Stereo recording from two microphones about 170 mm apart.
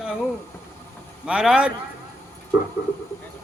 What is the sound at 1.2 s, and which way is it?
Speech, 5° right (ahead or behind).